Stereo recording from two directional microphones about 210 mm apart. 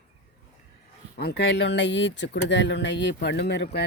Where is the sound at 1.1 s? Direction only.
50° left (ahead or behind).